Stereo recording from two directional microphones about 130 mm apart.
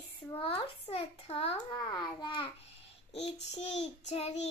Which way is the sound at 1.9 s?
35° left (ahead or behind).